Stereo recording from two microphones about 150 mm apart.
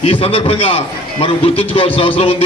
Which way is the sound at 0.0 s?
40° left (ahead or behind).